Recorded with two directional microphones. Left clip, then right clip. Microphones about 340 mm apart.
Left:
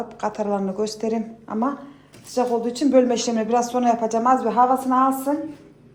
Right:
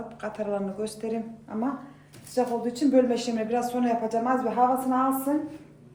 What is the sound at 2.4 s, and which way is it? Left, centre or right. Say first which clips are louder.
Speech: left 5 dB; left.